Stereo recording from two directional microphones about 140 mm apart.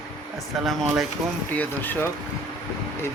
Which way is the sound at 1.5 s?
15° left (ahead or behind).